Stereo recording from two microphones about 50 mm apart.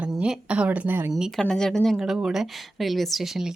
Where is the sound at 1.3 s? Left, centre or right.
Centre.